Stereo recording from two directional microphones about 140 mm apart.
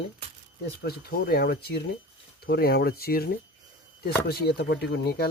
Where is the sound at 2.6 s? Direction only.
90° left.